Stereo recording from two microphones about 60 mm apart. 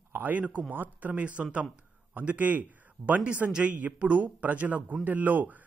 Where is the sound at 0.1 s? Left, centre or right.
Right.